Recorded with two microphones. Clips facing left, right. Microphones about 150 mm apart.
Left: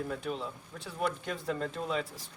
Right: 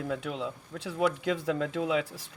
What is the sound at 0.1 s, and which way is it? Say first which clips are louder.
Speech: right 3 dB; 75° right (ahead or behind).